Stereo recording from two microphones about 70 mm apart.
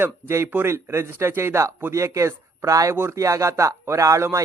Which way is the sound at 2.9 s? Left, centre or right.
Right.